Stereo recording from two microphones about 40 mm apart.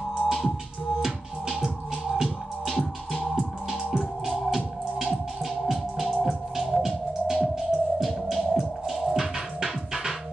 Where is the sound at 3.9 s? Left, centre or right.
Centre.